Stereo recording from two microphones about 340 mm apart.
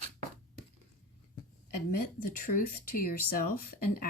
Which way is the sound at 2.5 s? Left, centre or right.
Left.